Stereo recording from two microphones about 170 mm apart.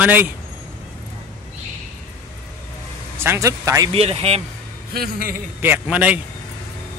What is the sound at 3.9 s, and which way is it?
Speech, 35° right (ahead or behind).